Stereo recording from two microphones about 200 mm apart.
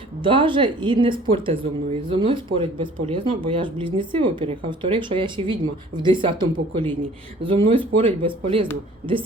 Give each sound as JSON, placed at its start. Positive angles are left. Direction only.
{"t": 0.2, "sound": "speech", "side_deg": -25}